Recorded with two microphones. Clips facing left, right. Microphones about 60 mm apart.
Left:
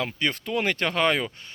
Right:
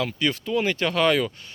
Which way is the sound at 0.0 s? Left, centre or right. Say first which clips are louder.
Right 2 dB; left.